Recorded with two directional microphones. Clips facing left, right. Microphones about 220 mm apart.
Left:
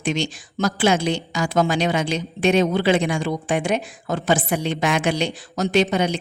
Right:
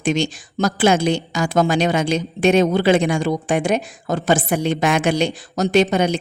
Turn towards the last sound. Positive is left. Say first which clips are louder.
# right 3 dB
turn(degrees=-45)  # may be behind; listen again after turning